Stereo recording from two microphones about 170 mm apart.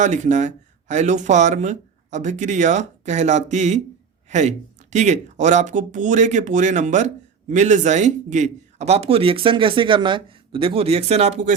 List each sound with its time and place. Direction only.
0.0 s a man's voice: 45° right (ahead or behind)